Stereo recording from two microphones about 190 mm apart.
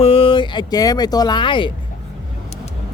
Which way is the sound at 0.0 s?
30° left (ahead or behind).